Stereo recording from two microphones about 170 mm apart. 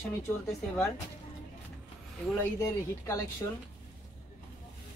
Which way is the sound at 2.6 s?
20° left (ahead or behind).